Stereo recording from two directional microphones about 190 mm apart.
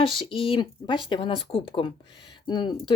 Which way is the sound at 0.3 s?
30° left (ahead or behind).